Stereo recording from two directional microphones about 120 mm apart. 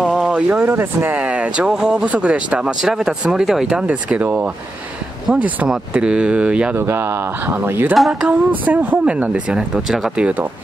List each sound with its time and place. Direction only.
0.1 s speech: 10° right (ahead or behind)
6.8 s speech: 20° right (ahead or behind)
7.9 s speech: 5° right (ahead or behind)